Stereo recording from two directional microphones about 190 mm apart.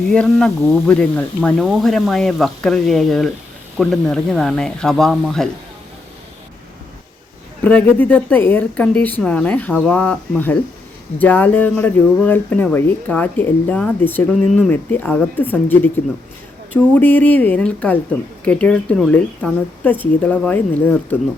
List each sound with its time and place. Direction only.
0.1 s speech: 5° left (ahead or behind)
7.6 s speech: 10° left (ahead or behind)